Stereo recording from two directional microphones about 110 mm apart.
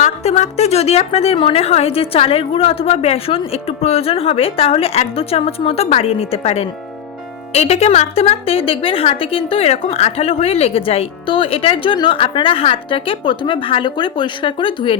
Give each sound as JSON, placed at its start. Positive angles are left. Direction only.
{"t": 0.0, "sound": "a woman's voice", "side_deg": 85}